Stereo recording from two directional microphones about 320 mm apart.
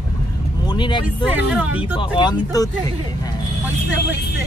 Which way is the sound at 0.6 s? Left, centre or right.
Centre.